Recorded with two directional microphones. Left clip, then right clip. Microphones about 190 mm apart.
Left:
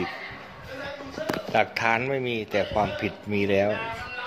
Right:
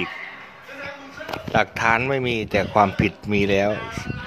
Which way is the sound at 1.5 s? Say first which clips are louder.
Right 4 dB; 20° right (ahead or behind).